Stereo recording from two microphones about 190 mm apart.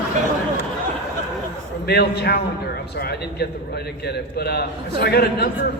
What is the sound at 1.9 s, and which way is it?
A man's voice, 60° left (ahead or behind).